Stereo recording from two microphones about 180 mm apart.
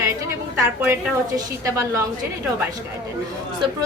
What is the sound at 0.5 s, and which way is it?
A woman's voice, 15° right (ahead or behind).